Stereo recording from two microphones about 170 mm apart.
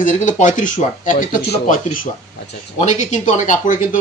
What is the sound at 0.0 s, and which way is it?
Speech, 45° left (ahead or behind).